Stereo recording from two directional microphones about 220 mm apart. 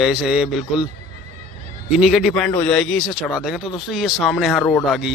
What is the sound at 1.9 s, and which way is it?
A man's voice, centre (ahead or behind).